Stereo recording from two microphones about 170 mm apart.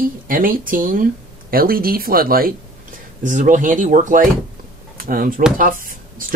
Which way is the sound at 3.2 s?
50° right (ahead or behind).